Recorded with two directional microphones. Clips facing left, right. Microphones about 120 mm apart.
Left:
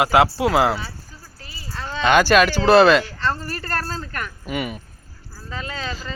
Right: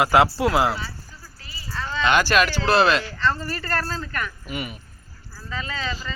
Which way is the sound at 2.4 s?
55° left (ahead or behind).